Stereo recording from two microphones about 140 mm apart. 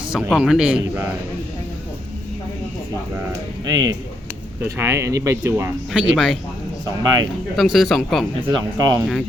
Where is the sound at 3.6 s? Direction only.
30° right (ahead or behind).